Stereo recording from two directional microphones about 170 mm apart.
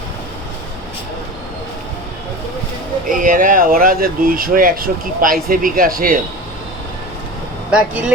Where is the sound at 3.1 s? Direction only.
55° right (ahead or behind).